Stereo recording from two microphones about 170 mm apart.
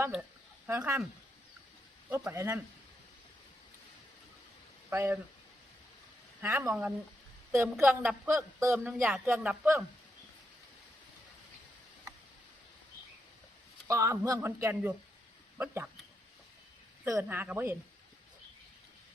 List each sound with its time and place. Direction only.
0.7 s speech: 15° right (ahead or behind)
2.0 s speech: 15° right (ahead or behind)
4.9 s speech: 15° right (ahead or behind)
6.4 s speech: 15° right (ahead or behind)
13.8 s speech: 20° right (ahead or behind)
17.0 s speech: 15° right (ahead or behind)